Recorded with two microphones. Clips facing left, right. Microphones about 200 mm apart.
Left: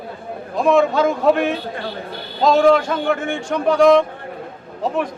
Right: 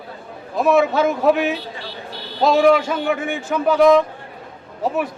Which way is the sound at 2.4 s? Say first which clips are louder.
Left 1 dB; 10° right (ahead or behind).